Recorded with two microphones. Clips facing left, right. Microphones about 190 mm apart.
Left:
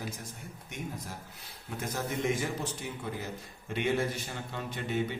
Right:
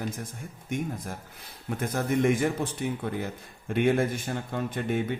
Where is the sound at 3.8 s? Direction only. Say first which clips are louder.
Right 6 dB; 55° right (ahead or behind).